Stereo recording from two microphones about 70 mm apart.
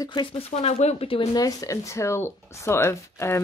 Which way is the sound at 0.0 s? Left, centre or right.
Left.